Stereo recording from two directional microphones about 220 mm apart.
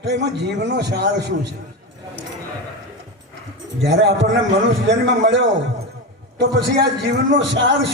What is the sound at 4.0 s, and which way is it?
A man's voice, 55° right (ahead or behind).